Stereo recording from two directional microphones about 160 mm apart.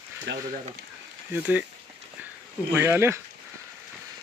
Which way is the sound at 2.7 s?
15° right (ahead or behind).